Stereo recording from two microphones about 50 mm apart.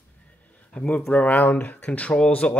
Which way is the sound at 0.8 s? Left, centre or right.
Left.